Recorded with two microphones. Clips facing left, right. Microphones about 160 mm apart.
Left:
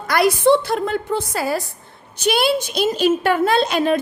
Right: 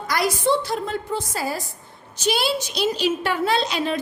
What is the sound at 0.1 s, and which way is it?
A woman's voice, 60° left (ahead or behind).